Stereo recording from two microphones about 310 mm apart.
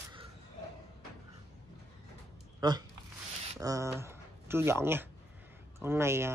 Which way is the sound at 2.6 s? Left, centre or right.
Centre.